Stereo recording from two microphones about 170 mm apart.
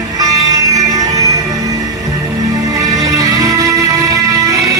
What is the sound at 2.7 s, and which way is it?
Music, 20° right (ahead or behind).